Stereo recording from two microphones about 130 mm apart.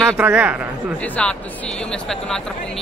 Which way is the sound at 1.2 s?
5° left (ahead or behind).